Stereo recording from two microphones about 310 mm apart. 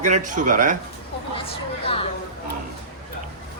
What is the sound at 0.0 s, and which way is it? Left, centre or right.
Speech, right.